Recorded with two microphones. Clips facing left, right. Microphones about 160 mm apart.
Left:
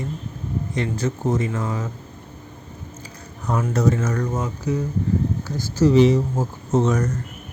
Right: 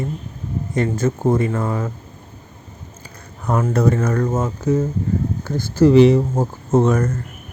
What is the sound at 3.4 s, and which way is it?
Speech, 55° right (ahead or behind).